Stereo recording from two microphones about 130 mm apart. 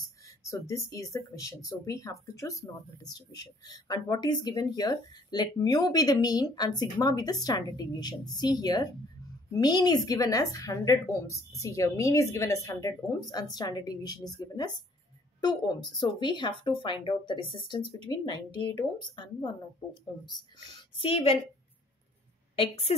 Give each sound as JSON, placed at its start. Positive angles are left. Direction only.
{"t": 0.5, "sound": "speech", "side_deg": 25}
{"t": 21.0, "sound": "a woman's voice", "side_deg": 45}
{"t": 22.6, "sound": "a woman's voice", "side_deg": 45}